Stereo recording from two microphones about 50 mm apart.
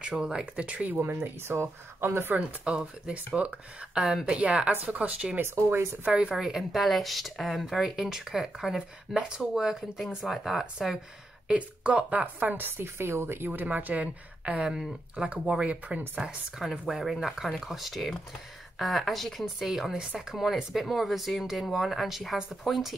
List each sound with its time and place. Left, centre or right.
0.0 s a woman's voice: centre
1.0 s speech: right
2.3 s a woman's voice: centre
4.0 s speech: centre
4.4 s a woman's voice: right
5.4 s speech: right
6.0 s a woman's voice: right
6.3 s speech: centre
11.4 s a woman's voice: right
12.7 s speech: right
13.5 s speech: right
14.4 s a woman's voice: right
16.2 s speech: centre
19.7 s speech: centre